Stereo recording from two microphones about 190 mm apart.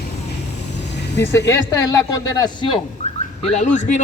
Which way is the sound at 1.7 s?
15° left (ahead or behind).